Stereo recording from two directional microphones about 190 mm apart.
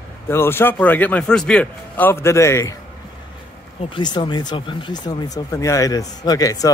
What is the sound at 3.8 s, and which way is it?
Speech, 25° left (ahead or behind).